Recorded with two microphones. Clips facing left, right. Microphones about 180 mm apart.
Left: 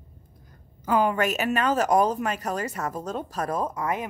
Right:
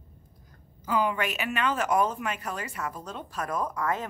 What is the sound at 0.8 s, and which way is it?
Speech, 50° left (ahead or behind).